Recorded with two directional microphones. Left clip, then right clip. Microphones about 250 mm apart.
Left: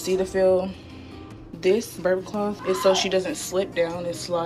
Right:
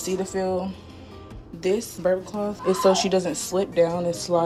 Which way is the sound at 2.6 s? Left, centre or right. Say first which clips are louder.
Right 1 dB; centre.